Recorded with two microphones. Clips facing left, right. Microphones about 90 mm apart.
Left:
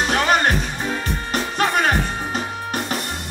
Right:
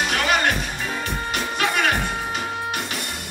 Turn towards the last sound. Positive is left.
turn(degrees=40)  # may be behind; listen again after turning